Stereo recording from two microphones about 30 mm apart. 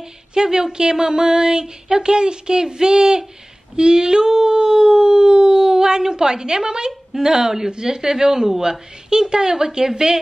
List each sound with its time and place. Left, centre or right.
0.3 s speech: right